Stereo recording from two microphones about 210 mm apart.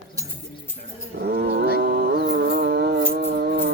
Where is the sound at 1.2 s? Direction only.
50° right (ahead or behind).